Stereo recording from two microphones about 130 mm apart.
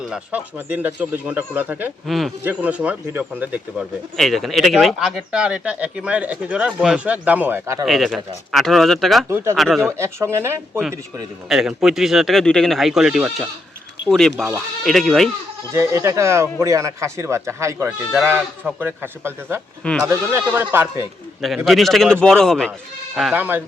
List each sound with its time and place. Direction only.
0.0 s speech: 10° right (ahead or behind)
2.0 s speech: centre (ahead or behind)
2.4 s speech: 10° right (ahead or behind)
4.2 s speech: centre (ahead or behind); by 7.8 s 15° right (ahead or behind)
7.9 s speech: centre (ahead or behind)
9.3 s speech: 20° right (ahead or behind)
9.6 s speech: centre (ahead or behind)
9.8 s speech: 20° right (ahead or behind)
11.4 s speech: 5° right (ahead or behind)
15.7 s speech: 20° right (ahead or behind)
21.4 s speech: centre (ahead or behind)
23.3 s speech: 15° right (ahead or behind)